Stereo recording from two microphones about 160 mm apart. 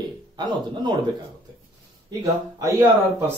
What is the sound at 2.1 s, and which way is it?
Speech, 20° right (ahead or behind).